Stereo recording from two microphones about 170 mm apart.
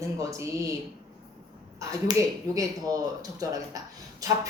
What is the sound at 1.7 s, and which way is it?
Speech, 20° right (ahead or behind).